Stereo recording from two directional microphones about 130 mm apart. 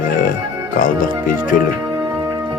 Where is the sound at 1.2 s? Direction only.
90° left.